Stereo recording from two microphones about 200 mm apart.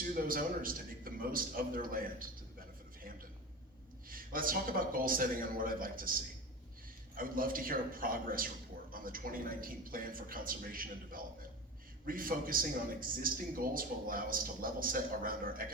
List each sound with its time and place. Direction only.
0.1 s a man's voice: 45° right (ahead or behind)
4.1 s a man's voice: 45° right (ahead or behind)